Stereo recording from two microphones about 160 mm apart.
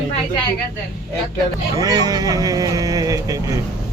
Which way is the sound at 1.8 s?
25° right (ahead or behind).